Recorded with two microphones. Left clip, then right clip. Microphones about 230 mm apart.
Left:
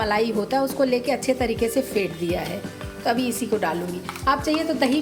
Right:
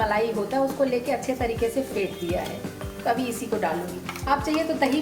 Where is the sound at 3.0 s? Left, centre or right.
Left.